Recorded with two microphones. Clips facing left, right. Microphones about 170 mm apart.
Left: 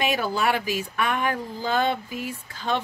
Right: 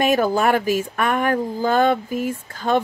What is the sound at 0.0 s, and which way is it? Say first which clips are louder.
Speech: right 7 dB; 45° right (ahead or behind).